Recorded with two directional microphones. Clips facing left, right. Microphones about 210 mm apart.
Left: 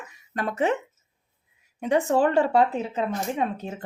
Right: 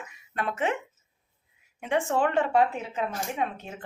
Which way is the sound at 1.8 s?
40° left (ahead or behind).